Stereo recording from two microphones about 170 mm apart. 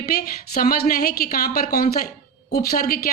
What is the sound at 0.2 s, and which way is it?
Speech, 60° left (ahead or behind).